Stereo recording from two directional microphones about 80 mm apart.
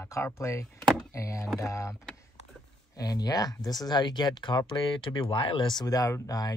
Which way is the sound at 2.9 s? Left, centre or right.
Left.